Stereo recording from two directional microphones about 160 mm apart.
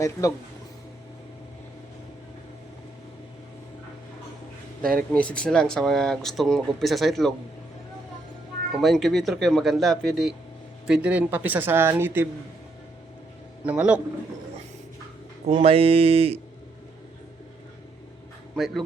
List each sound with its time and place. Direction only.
0.0 s speech: 20° left (ahead or behind)
4.9 s speech: 5° left (ahead or behind)
8.7 s speech: centre (ahead or behind)
13.7 s speech: 10° right (ahead or behind)
15.4 s speech: 35° right (ahead or behind)
18.5 s speech: centre (ahead or behind)